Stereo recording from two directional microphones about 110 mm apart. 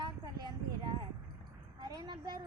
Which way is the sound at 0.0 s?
40° right (ahead or behind).